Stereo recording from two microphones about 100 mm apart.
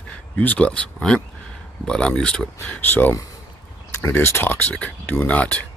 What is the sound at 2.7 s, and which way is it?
Speech, 20° left (ahead or behind).